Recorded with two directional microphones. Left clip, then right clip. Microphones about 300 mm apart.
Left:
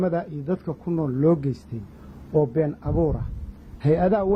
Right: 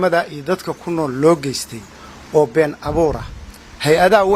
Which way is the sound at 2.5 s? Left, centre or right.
Centre.